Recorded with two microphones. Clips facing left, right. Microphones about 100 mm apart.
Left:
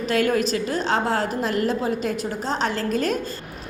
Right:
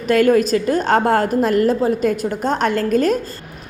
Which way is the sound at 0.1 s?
45° right (ahead or behind).